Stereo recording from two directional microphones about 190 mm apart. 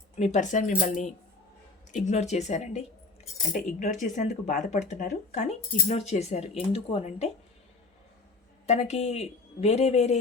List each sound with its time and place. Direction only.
0.2 s speech: 40° left (ahead or behind)
8.6 s speech: 35° left (ahead or behind)